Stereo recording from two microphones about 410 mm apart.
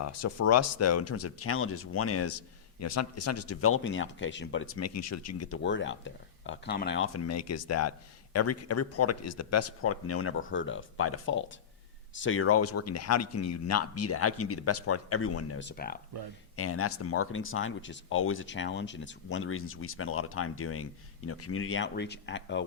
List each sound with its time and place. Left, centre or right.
0.0 s speech: left
16.6 s speech: left